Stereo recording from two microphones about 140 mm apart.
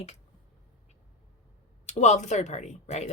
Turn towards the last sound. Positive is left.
turn(degrees=50)  # may be behind; listen again after turning